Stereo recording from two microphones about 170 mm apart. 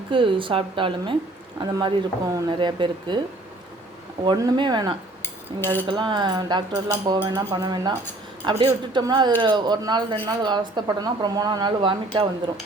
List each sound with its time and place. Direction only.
0.1 s a woman's voice: 30° right (ahead or behind)
4.3 s a woman's voice: 25° right (ahead or behind)
5.2 s cutlery: 15° left (ahead or behind)
5.9 s a woman's voice: 25° right (ahead or behind)